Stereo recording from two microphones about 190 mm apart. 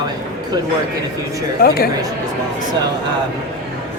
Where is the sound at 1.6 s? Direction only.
55° left (ahead or behind).